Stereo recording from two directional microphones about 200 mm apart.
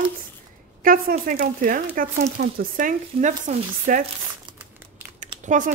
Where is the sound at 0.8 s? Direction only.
45° right (ahead or behind).